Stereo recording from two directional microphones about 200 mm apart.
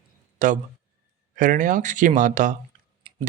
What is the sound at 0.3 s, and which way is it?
Speech, 40° right (ahead or behind).